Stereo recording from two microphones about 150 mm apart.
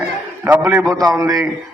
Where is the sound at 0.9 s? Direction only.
25° right (ahead or behind).